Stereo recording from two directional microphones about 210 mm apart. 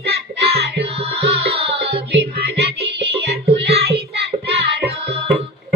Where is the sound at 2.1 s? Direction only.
50° right (ahead or behind).